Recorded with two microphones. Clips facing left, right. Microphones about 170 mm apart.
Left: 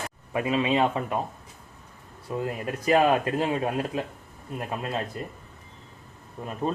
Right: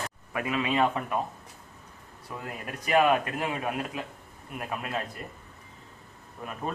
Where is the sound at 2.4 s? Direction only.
30° left (ahead or behind).